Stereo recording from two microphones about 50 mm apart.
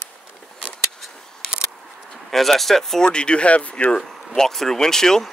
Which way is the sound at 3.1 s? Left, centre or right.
Left.